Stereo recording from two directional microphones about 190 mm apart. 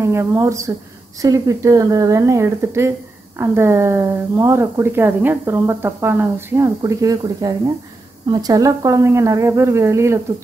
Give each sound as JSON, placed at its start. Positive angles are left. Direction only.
{"t": 0.0, "sound": "a woman's voice", "side_deg": -15}